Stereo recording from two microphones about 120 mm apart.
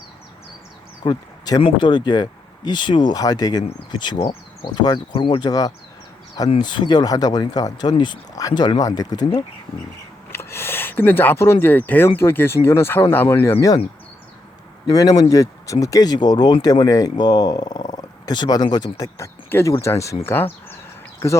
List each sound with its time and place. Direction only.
1.0 s speech: 35° left (ahead or behind)
10.3 s speech: 20° left (ahead or behind)
14.8 s speech: 30° left (ahead or behind)